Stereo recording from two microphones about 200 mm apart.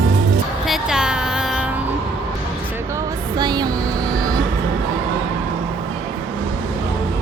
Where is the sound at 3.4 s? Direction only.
20° right (ahead or behind).